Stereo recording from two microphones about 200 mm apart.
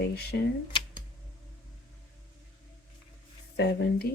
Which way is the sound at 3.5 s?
60° left (ahead or behind).